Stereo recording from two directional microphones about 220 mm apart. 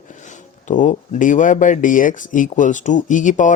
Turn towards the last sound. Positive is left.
turn(degrees=35)  # may be behind; listen again after turning